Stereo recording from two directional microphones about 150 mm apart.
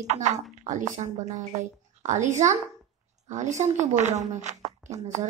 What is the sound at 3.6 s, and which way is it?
A woman's voice, 50° right (ahead or behind).